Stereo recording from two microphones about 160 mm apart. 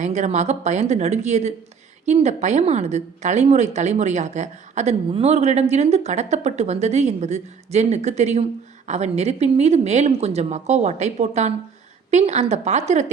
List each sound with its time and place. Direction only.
0.0 s a woman's voice: 45° right (ahead or behind)